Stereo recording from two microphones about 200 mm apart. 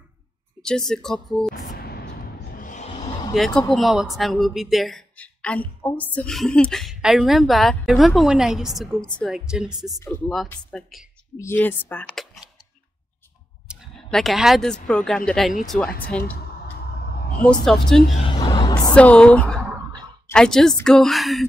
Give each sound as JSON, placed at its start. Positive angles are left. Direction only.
{"t": 0.6, "sound": "speech", "side_deg": 5}
{"t": 1.5, "sound": "a sound", "side_deg": 50}
{"t": 3.3, "sound": "speech", "side_deg": 0}
{"t": 9.9, "sound": "speech", "side_deg": 10}
{"t": 10.3, "sound": "speech", "side_deg": 0}
{"t": 13.7, "sound": "speech", "side_deg": 0}
{"t": 17.0, "sound": "a sound", "side_deg": 50}
{"t": 17.7, "sound": "speech", "side_deg": 5}
{"t": 18.2, "sound": "a sound", "side_deg": 25}
{"t": 18.9, "sound": "speech", "side_deg": 5}